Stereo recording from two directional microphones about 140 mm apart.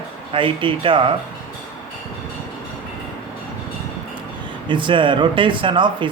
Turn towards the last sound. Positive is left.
turn(degrees=-35)  # may be behind; listen again after turning